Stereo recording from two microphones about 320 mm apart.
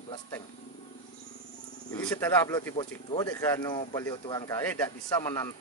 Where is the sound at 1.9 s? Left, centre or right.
Centre.